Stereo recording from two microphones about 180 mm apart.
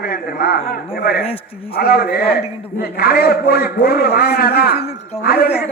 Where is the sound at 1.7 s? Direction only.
55° left (ahead or behind).